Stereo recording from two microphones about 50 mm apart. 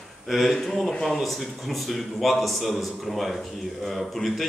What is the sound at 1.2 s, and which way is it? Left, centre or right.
Speech, centre.